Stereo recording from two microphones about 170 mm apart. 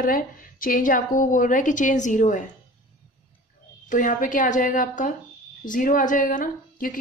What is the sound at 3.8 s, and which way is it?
A woman's voice, 50° left (ahead or behind).